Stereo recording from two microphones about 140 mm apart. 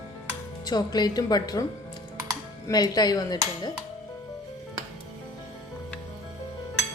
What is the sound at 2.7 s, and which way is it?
Speech, 30° left (ahead or behind).